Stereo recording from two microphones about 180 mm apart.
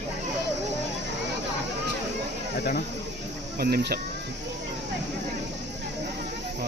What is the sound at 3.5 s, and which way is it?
Speech, 60° right (ahead or behind).